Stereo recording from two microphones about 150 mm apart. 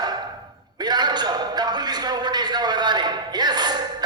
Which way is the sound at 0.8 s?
30° right (ahead or behind).